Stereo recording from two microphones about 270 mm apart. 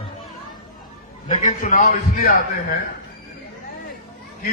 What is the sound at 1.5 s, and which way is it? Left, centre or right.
Speech, left.